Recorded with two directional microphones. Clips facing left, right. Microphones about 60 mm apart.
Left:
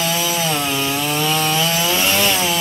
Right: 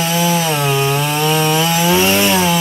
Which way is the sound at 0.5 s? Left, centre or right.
Right.